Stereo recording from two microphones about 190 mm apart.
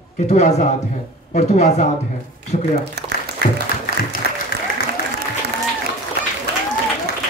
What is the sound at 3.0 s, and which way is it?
Speech, 55° right (ahead or behind).